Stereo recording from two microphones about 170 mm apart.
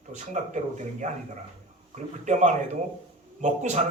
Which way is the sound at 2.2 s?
45° right (ahead or behind).